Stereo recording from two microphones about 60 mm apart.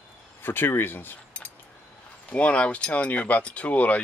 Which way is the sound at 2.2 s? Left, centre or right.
Left.